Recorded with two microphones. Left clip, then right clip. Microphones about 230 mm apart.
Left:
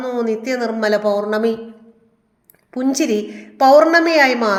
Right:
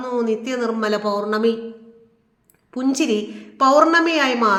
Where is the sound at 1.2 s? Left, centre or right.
Centre.